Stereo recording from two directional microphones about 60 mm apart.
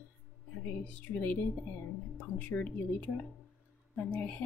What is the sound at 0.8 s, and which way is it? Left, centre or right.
A woman's voice, left.